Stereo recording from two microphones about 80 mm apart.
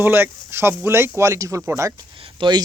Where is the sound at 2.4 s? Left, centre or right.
Right.